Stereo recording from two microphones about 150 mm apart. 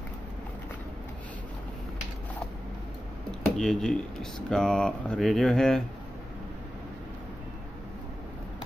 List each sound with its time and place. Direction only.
3.3 s speech: 5° left (ahead or behind)